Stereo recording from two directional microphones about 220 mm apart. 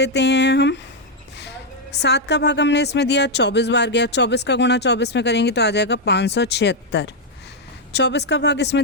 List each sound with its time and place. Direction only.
0.0 s a woman's voice: 50° left (ahead or behind)